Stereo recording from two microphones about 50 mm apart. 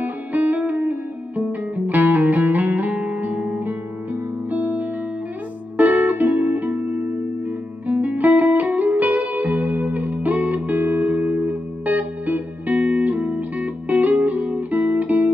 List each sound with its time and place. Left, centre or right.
0.0 s music: right